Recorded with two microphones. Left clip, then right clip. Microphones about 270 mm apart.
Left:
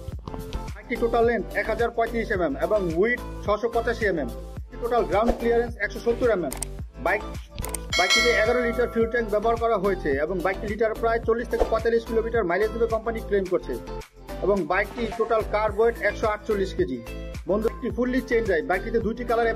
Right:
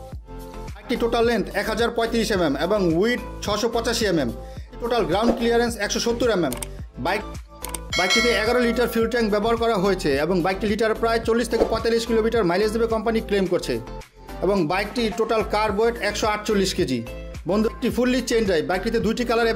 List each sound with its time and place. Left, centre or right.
0.8 s speech: right
7.9 s speech: centre
8.4 s speech: right